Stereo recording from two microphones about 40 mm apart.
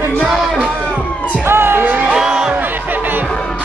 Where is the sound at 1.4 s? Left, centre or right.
Right.